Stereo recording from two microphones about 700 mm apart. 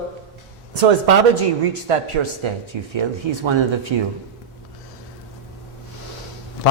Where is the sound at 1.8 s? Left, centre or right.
Right.